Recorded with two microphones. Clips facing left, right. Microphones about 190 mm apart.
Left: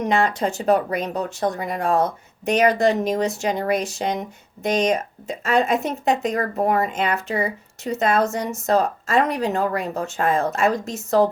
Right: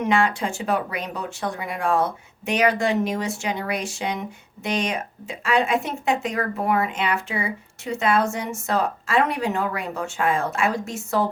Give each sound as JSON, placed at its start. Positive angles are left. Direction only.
{"t": 0.0, "sound": "speech", "side_deg": 40}